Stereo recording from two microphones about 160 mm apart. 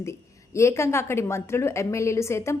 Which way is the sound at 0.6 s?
15° left (ahead or behind).